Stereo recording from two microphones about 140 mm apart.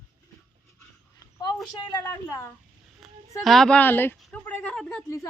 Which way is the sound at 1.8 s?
30° left (ahead or behind).